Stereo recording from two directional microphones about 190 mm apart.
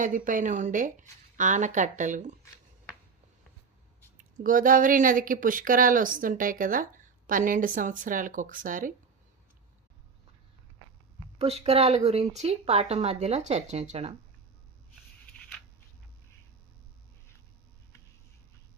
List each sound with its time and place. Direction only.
0.0 s speech: 45° right (ahead or behind)
4.2 s speech: 45° right (ahead or behind)
11.3 s speech: 35° right (ahead or behind)